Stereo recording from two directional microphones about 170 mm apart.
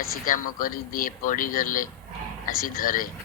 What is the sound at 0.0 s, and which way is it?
A man's voice, 55° left (ahead or behind).